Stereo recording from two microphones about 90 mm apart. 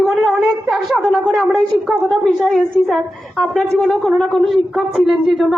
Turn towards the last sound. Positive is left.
turn(degrees=0)  # may be behind; listen again after turning